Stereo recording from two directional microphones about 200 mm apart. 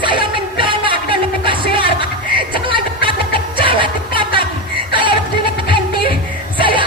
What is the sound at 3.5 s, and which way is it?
Music, 25° right (ahead or behind).